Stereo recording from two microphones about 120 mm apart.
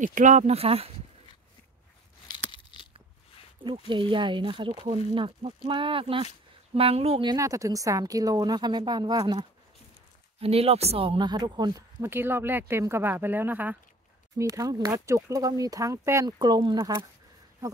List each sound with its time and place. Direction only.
0.0 s speech: 90° right; by 0.9 s 55° right (ahead or behind)
2.5 s a sound: 45° left (ahead or behind)
3.5 s speech: 45° right (ahead or behind)
7.2 s a woman's voice: 25° right (ahead or behind)
10.4 s speech: 55° right (ahead or behind); by 11.8 s 35° right (ahead or behind)
12.0 s speech: 20° right (ahead or behind)
14.4 s speech: 30° right (ahead or behind)
16.3 s a woman's voice: 35° right (ahead or behind)
16.7 s speech: 25° right (ahead or behind)